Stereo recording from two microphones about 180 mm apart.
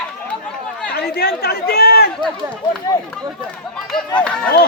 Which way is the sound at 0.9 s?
60° left (ahead or behind).